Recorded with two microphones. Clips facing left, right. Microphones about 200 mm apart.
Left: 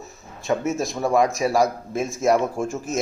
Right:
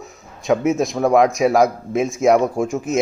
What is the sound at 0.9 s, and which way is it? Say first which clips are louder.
Speech: right 5 dB; 60° right (ahead or behind).